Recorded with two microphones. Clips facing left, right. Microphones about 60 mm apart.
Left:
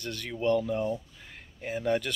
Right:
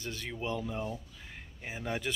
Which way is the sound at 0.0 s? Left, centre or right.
Centre.